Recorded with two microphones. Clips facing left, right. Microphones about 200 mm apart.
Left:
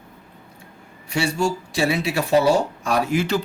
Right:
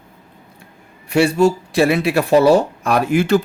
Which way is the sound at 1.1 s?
60° right (ahead or behind).